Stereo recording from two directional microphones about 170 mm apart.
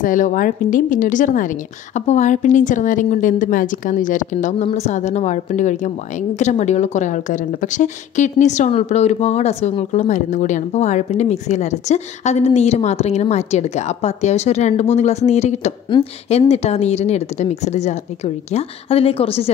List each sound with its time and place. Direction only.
0.0 s a woman's voice: 50° left (ahead or behind); by 19.5 s 35° left (ahead or behind)